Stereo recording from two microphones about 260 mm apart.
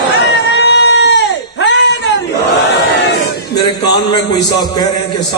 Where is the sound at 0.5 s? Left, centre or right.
Left.